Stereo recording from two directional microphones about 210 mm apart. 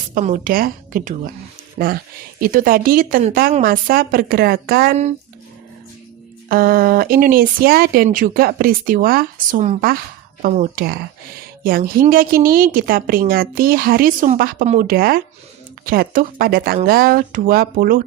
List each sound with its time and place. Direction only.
0.1 s a woman's voice: 40° right (ahead or behind)
2.4 s speech: 40° right (ahead or behind)
6.5 s speech: 45° right (ahead or behind)